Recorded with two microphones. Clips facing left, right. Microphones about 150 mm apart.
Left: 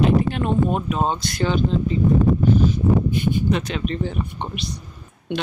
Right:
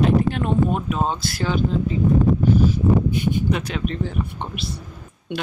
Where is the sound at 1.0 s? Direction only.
5° right (ahead or behind).